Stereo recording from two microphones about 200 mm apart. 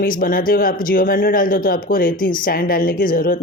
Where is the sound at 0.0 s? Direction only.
45° left (ahead or behind).